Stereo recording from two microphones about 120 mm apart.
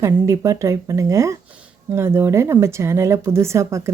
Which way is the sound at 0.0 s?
25° right (ahead or behind).